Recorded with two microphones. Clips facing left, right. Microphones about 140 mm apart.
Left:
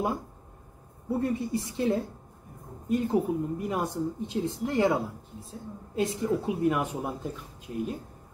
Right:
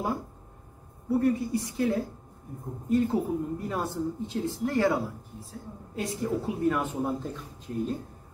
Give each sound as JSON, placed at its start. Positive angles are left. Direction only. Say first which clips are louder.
{"t": 1.2, "sound": "a woman's voice", "louder": "right 2 dB", "side_deg": 25}